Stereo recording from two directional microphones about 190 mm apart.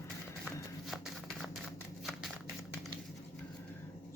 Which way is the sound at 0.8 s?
Centre (ahead or behind).